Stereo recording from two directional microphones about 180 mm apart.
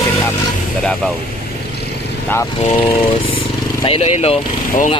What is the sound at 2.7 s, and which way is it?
Speech, 30° left (ahead or behind).